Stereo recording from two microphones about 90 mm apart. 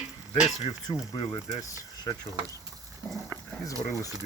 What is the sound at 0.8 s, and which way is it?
Speech, 55° left (ahead or behind).